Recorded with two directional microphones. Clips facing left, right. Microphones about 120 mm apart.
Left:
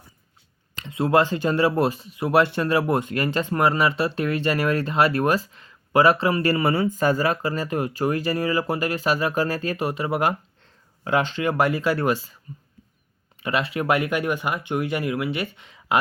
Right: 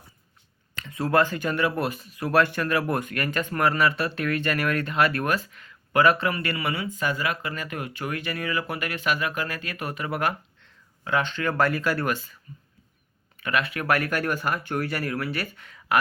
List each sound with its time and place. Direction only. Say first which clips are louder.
0.8 s speech: left 3 dB; 25° left (ahead or behind)